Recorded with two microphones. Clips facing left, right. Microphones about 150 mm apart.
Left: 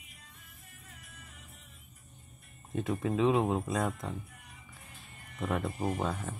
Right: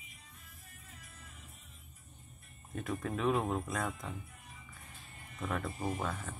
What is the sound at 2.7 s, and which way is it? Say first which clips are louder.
Speech: left 6 dB; 25° left (ahead or behind).